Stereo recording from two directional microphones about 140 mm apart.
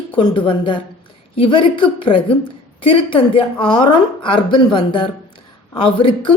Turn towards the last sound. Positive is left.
turn(degrees=35)  # may be behind; listen again after turning